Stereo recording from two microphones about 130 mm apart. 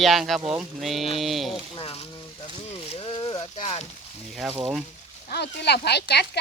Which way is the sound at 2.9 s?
45° left (ahead or behind).